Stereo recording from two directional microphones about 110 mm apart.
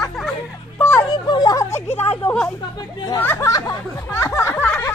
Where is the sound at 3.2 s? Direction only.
20° left (ahead or behind).